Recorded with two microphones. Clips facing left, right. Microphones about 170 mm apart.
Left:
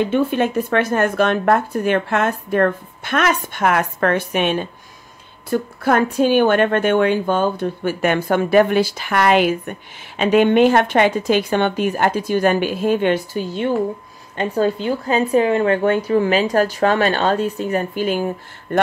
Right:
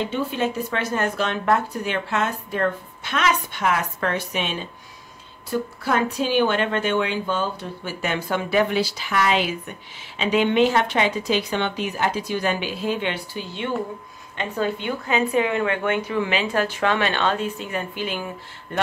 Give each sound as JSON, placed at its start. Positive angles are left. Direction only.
{"t": 0.0, "sound": "a woman's voice", "side_deg": 55}